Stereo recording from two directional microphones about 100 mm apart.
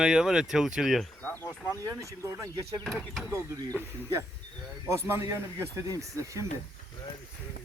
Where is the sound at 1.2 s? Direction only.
20° left (ahead or behind).